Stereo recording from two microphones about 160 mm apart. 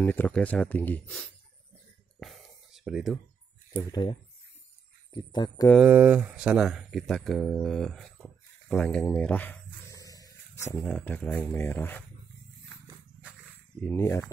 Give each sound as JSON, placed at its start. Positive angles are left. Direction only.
{"t": 0.0, "sound": "speech", "side_deg": 10}
{"t": 2.1, "sound": "a sound", "side_deg": 0}
{"t": 3.7, "sound": "speech", "side_deg": 30}
{"t": 5.8, "sound": "speech", "side_deg": -10}
{"t": 10.8, "sound": "speech", "side_deg": 10}
{"t": 13.7, "sound": "speech", "side_deg": 15}